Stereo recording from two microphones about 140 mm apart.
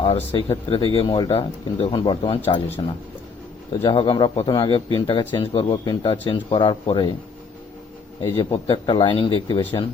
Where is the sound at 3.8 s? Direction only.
40° left (ahead or behind).